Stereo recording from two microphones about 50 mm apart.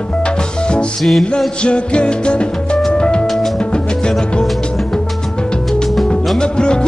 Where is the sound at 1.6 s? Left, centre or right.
Left.